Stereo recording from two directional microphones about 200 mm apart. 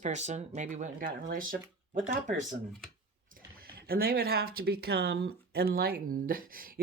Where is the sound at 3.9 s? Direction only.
50° right (ahead or behind).